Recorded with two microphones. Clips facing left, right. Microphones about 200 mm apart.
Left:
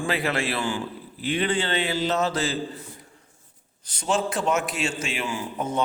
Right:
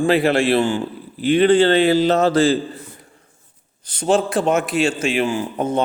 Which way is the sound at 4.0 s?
55° right (ahead or behind).